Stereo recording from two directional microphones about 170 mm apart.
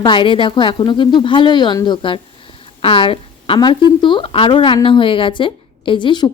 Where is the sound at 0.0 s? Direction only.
30° left (ahead or behind).